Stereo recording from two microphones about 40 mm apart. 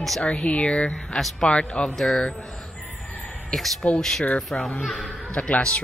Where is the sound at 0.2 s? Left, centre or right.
Left.